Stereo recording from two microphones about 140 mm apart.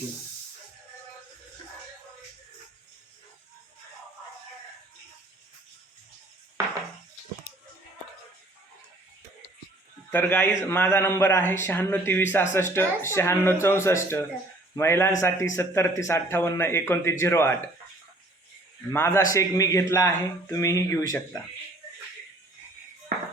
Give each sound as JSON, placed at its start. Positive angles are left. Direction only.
{"t": 10.1, "sound": "a man's voice", "side_deg": 15}
{"t": 18.9, "sound": "a man's voice", "side_deg": 20}